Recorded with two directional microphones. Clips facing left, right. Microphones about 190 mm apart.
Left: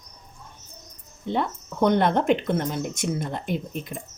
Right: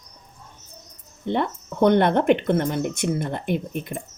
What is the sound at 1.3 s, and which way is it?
Speech, 60° right (ahead or behind).